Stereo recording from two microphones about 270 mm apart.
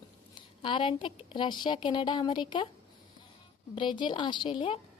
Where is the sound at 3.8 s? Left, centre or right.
Centre.